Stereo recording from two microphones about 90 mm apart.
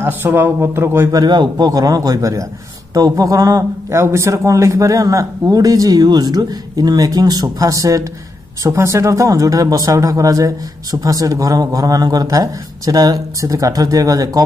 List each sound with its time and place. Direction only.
0.0 s speech: 25° right (ahead or behind)
1.1 s a man's voice: 50° right (ahead or behind)